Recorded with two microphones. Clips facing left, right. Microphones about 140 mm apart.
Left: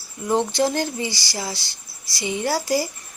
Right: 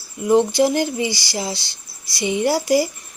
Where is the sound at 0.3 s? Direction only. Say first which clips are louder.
Right 5 dB; 15° right (ahead or behind).